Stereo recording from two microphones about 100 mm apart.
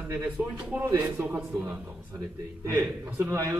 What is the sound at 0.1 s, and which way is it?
A man's voice, 20° right (ahead or behind).